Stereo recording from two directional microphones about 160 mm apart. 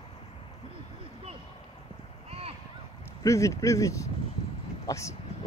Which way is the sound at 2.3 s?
35° right (ahead or behind).